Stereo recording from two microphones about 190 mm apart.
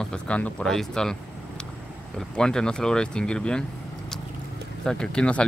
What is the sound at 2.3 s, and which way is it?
Speech, 5° left (ahead or behind).